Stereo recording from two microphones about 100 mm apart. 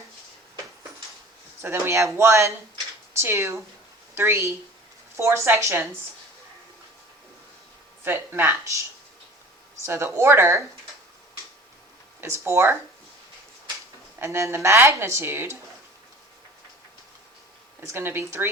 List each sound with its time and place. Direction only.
1.6 s speech: 25° right (ahead or behind)
8.0 s speech: 20° right (ahead or behind)
9.8 s speech: 25° right (ahead or behind)
12.2 s speech: 25° right (ahead or behind)
14.2 s speech: 30° right (ahead or behind)
17.7 s speech: 25° right (ahead or behind)